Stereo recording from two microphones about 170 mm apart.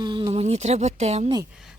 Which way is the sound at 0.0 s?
25° right (ahead or behind).